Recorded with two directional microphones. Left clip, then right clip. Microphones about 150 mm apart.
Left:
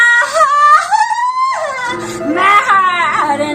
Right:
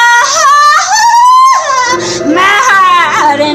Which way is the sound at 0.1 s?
20° right (ahead or behind).